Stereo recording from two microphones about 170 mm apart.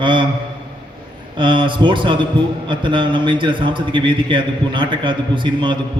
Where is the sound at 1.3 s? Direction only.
30° right (ahead or behind).